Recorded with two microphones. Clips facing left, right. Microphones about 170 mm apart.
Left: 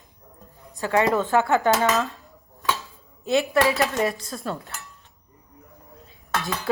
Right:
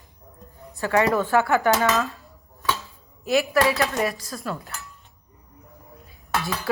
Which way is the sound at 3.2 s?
20° left (ahead or behind).